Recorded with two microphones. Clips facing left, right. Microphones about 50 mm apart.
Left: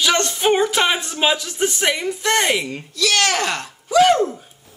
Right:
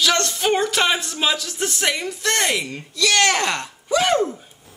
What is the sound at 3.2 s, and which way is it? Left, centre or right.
Speech, centre.